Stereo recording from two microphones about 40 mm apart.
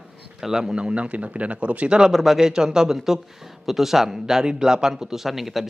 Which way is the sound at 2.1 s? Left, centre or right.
Centre.